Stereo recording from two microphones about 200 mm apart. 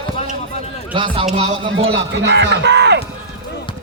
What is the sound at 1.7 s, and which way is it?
A man's voice, 60° right (ahead or behind).